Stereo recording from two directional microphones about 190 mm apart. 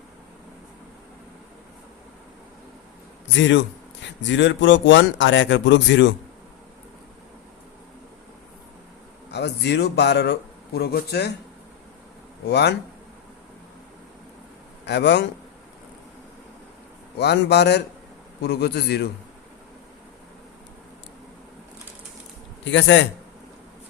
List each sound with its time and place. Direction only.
3.3 s speech: 80° left
9.3 s a man's voice: 60° left (ahead or behind)
12.5 s a man's voice: 60° left (ahead or behind)
14.8 s a man's voice: 65° left (ahead or behind)
17.2 s a man's voice: 60° left (ahead or behind)
22.6 s speech: 75° left (ahead or behind)